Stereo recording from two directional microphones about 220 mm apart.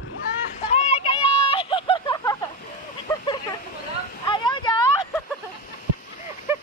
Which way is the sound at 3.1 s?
20° left (ahead or behind).